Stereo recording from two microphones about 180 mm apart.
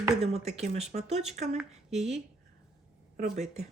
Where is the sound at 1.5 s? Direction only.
Centre (ahead or behind).